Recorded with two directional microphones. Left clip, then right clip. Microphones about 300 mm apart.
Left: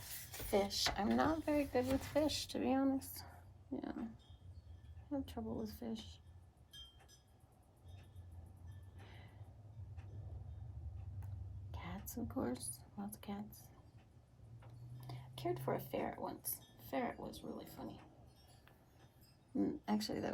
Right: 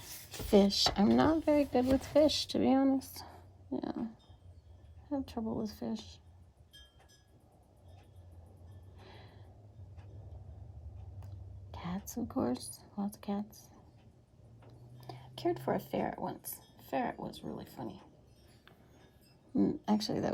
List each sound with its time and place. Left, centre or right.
0.3 s speech: right
3.7 s a sound: right
5.1 s speech: right
11.9 s speech: right
15.0 s speech: right
19.5 s speech: right